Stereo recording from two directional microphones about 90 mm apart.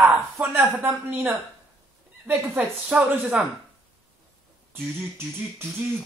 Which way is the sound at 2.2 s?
15° right (ahead or behind).